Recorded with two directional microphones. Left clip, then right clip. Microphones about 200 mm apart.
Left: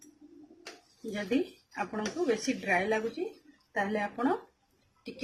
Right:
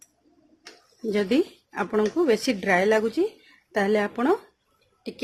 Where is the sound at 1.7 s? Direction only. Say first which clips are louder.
Right 12 dB; 55° right (ahead or behind).